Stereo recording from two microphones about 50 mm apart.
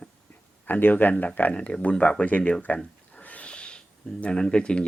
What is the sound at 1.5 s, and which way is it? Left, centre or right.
Speech, left.